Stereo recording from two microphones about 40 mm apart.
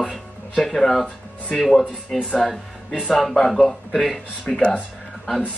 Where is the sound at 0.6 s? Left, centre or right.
Centre.